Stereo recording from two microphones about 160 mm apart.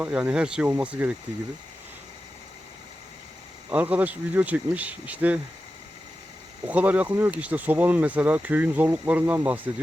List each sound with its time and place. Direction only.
0.0 s speech: 10° right (ahead or behind)
3.7 s speech: 10° right (ahead or behind)
6.7 s speech: 10° right (ahead or behind)